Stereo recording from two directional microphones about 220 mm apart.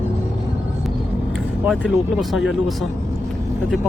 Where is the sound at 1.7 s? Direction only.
Centre (ahead or behind).